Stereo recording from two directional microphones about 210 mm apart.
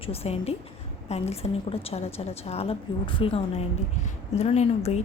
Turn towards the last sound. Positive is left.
turn(degrees=30)  # may be behind; listen again after turning